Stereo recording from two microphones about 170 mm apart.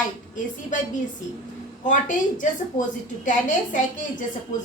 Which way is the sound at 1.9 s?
50° left (ahead or behind).